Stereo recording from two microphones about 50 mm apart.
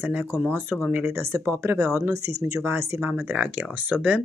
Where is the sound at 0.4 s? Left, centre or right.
Right.